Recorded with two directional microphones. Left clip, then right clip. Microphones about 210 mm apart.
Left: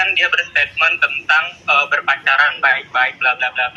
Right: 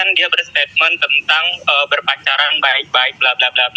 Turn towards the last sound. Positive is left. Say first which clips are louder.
# right 2 dB
turn(degrees=-60)  # may be behind; listen again after turning